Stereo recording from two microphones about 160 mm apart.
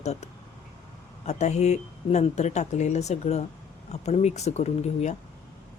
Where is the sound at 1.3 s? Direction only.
45° left (ahead or behind).